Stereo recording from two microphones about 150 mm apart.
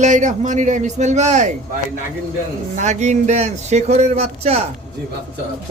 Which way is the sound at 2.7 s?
50° right (ahead or behind).